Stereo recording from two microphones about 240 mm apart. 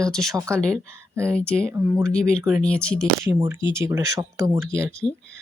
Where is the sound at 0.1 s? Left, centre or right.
Centre.